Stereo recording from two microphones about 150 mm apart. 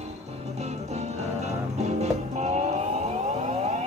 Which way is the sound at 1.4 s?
45° right (ahead or behind).